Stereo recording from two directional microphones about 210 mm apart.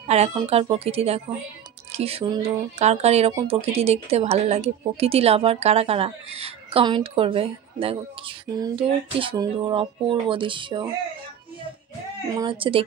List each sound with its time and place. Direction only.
0.1 s a woman's voice: 30° right (ahead or behind)
12.3 s a woman's voice: 20° right (ahead or behind)